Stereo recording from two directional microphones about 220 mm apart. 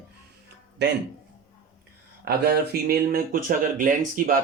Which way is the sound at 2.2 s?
45° right (ahead or behind).